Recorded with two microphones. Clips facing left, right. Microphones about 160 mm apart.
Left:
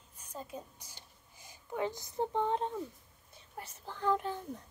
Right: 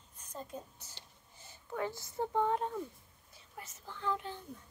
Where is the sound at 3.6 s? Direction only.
35° left (ahead or behind).